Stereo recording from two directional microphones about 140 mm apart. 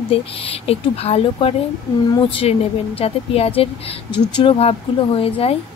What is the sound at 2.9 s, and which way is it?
Speech, 45° left (ahead or behind).